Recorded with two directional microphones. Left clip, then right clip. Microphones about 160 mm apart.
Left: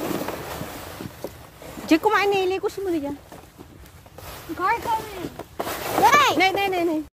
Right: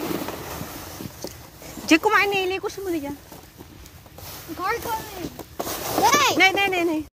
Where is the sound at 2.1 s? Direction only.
25° left (ahead or behind).